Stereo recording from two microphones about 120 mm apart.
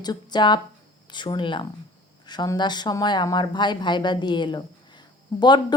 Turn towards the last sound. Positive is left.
turn(degrees=40)  # may be behind; listen again after turning